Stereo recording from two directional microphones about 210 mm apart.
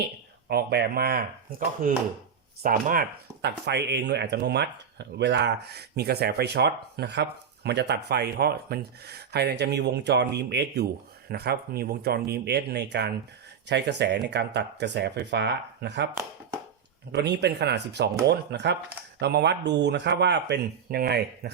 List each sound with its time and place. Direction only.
0.4 s speech: 50° right (ahead or behind)
17.1 s speech: 50° right (ahead or behind)